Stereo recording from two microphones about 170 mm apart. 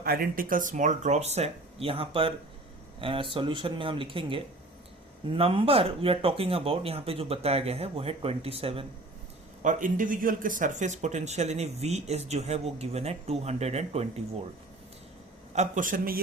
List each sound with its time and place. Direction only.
0.0 s speech: 60° right (ahead or behind); by 8.9 s 35° right (ahead or behind)
9.6 s speech: 50° right (ahead or behind)
15.5 s speech: 45° right (ahead or behind)